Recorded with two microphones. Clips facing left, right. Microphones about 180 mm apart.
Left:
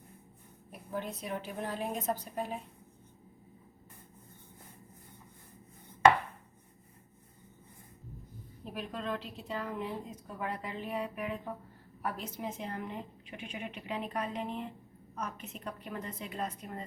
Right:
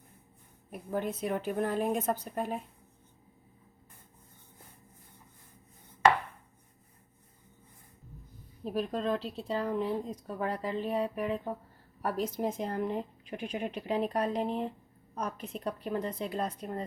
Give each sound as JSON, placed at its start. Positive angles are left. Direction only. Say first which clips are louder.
{"t": 0.7, "sound": "a woman's voice", "louder": "right 5 dB", "side_deg": -55}
{"t": 8.7, "sound": "speech", "louder": "right 6 dB", "side_deg": -40}